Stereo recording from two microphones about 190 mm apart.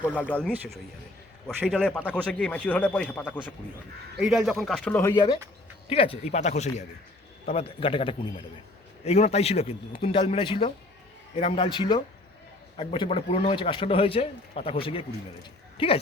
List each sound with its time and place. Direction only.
0.1 s speech: 10° left (ahead or behind)
1.6 s speech: 5° left (ahead or behind)
4.2 s speech: centre (ahead or behind)
5.1 s a man's voice: 25° left (ahead or behind)